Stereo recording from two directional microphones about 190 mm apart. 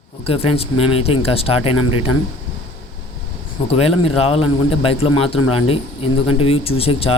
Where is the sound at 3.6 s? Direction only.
30° left (ahead or behind).